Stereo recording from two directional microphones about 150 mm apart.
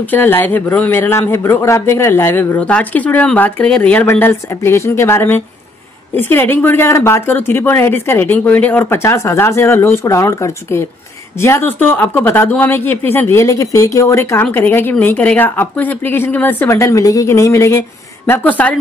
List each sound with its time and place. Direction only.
0.0 s speech: 15° left (ahead or behind)